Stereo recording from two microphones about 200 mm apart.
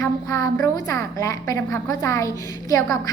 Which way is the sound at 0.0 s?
15° left (ahead or behind).